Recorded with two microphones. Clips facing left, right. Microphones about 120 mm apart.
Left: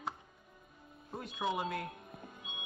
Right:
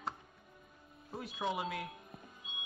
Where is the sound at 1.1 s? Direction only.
Centre (ahead or behind).